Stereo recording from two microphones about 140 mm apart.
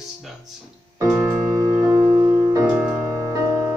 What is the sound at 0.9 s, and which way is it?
Music, 20° right (ahead or behind).